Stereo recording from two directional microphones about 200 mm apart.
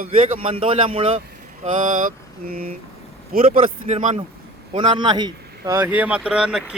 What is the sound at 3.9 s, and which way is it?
Speech, 30° right (ahead or behind).